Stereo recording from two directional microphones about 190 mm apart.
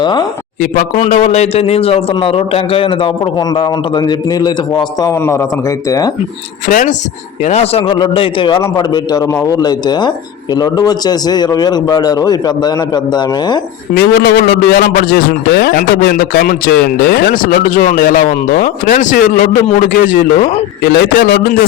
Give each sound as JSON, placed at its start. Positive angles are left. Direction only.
{"t": 0.0, "sound": "speech", "side_deg": 25}
{"t": 0.6, "sound": "a man's voice", "side_deg": 40}
{"t": 6.7, "sound": "a man's voice", "side_deg": 45}
{"t": 7.4, "sound": "a man's voice", "side_deg": 35}
{"t": 13.9, "sound": "a man's voice", "side_deg": 55}